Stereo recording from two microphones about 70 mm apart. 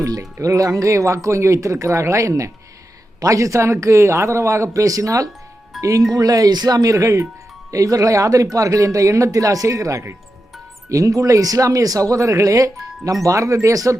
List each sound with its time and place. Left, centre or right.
0.0 s speech: right
5.7 s music: centre
6.1 s speech: right